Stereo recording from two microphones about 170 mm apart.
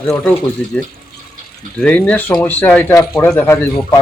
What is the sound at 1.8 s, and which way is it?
Speech, 5° left (ahead or behind).